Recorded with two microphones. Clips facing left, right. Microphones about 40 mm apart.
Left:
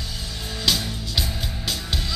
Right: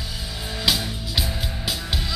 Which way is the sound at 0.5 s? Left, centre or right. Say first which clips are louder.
Even; centre.